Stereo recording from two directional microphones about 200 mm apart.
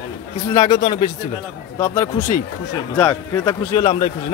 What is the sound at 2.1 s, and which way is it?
Speech, 40° left (ahead or behind).